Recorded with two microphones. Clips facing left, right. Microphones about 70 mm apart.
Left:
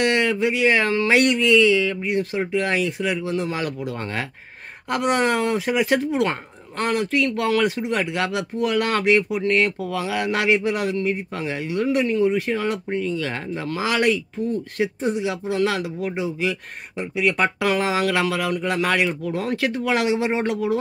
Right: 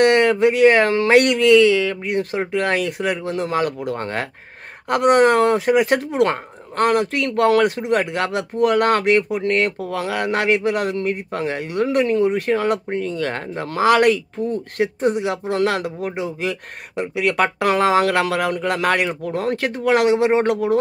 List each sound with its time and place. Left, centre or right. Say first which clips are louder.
0.0 s speech: right 6 dB; right
17.1 s speech: right 2 dB; right
17.6 s speech: right 5 dB; right